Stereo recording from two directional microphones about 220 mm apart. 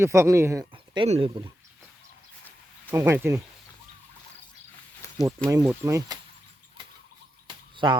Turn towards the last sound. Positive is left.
turn(degrees=-20)  # may be behind; listen again after turning